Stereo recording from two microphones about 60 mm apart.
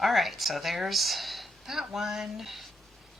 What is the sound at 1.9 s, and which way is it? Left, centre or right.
Speech, centre.